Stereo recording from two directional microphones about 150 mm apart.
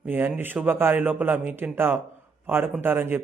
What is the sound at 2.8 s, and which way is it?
Mantra, 15° right (ahead or behind).